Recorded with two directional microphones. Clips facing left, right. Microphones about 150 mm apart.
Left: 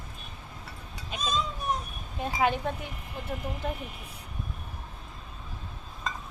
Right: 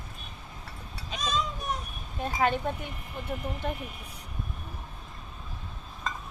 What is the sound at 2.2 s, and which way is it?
Speech, 10° left (ahead or behind).